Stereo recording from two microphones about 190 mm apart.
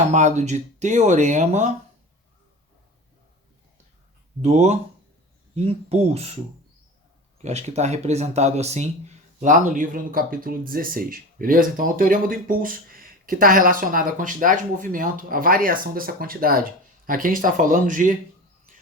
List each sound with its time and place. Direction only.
0.1 s speech: 40° right (ahead or behind)
4.4 s speech: 35° right (ahead or behind)
7.4 s speech: 35° right (ahead or behind)